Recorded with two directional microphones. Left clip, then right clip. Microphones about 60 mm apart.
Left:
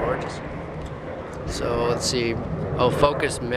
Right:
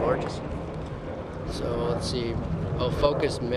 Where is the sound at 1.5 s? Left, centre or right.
Left.